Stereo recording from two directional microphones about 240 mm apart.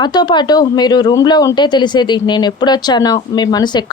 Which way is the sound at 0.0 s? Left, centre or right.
Centre.